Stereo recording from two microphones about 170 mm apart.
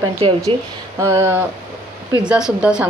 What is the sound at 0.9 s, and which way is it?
A woman's voice, 15° right (ahead or behind).